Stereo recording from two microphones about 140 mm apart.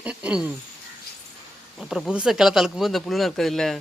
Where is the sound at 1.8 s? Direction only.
Centre (ahead or behind).